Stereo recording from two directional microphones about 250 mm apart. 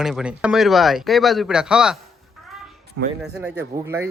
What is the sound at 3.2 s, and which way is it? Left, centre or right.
Speech, centre.